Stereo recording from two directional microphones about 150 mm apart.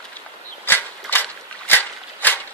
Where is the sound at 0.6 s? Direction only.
15° left (ahead or behind).